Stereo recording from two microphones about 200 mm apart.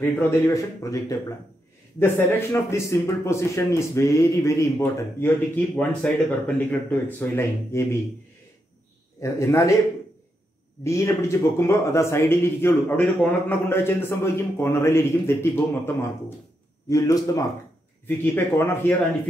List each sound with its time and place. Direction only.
0.0 s speech: 15° left (ahead or behind)
9.2 s speech: 15° left (ahead or behind)
10.8 s speech: 15° left (ahead or behind)